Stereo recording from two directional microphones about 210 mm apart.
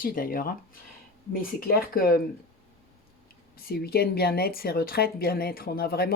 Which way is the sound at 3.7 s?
50° left (ahead or behind).